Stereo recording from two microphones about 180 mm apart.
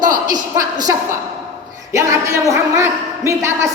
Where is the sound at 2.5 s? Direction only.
15° right (ahead or behind).